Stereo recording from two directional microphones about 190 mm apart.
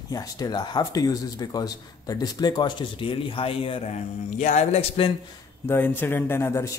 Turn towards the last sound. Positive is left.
turn(degrees=15)  # may be behind; listen again after turning